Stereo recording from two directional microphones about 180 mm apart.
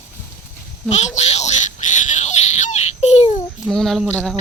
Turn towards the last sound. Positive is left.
turn(degrees=0)  # may be behind; listen again after turning